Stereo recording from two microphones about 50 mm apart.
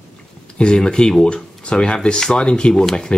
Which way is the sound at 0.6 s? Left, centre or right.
Centre.